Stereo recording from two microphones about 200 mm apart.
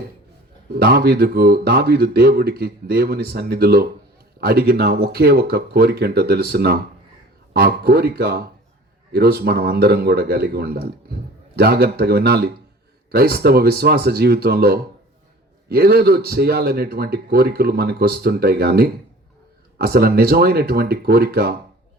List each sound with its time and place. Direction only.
0.8 s a man's voice: 50° right (ahead or behind)